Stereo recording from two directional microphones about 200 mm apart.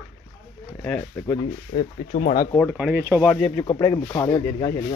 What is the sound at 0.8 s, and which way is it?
Speech, 10° left (ahead or behind).